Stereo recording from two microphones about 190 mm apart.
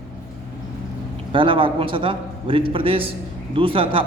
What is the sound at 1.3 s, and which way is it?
A man's voice, 25° right (ahead or behind).